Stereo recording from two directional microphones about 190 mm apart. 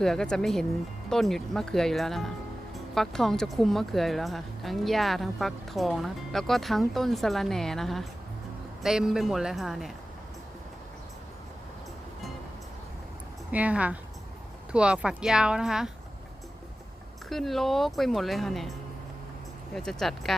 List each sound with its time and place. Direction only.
0.0 s speech: 5° left (ahead or behind)
13.5 s speech: 5° right (ahead or behind)
17.2 s speech: centre (ahead or behind)
19.7 s speech: centre (ahead or behind)